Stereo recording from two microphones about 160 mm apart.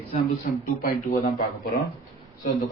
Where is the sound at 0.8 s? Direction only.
55° left (ahead or behind).